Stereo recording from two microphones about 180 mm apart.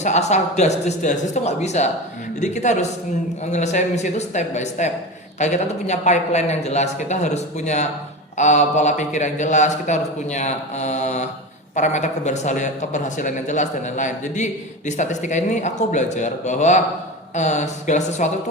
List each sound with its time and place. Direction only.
0.0 s speech: 40° left (ahead or behind)